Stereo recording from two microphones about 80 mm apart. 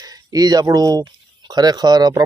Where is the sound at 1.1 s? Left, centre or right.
Right.